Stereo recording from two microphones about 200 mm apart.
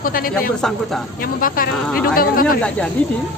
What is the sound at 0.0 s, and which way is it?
Speech, 45° left (ahead or behind).